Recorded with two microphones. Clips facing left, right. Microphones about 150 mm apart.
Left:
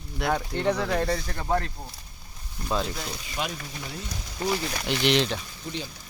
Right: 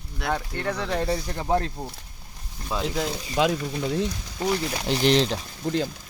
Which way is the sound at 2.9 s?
90° right.